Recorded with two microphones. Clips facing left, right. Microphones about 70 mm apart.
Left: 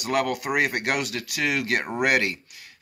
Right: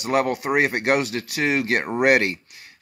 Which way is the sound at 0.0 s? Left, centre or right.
Right.